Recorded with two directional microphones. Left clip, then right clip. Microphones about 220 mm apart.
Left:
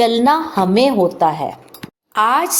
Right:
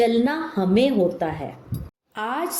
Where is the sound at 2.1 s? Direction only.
10° left (ahead or behind).